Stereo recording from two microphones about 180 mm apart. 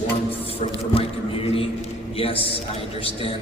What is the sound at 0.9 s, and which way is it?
A man's voice, 30° left (ahead or behind).